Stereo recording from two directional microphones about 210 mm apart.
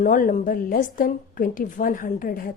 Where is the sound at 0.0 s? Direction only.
40° left (ahead or behind).